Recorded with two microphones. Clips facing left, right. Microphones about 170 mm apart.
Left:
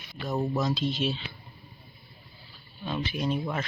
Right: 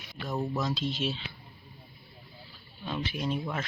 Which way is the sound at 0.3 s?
20° left (ahead or behind).